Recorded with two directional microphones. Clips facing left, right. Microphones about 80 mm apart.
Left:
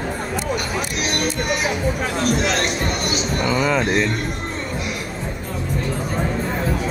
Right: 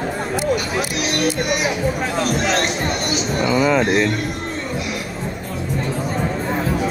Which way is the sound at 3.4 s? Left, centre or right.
Centre.